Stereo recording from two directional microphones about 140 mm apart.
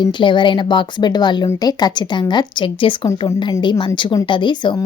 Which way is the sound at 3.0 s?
25° left (ahead or behind).